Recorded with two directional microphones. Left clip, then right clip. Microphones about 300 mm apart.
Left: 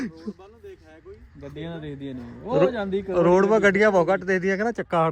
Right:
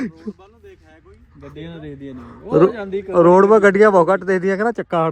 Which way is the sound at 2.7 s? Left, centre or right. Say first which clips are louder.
Right 2 dB; left.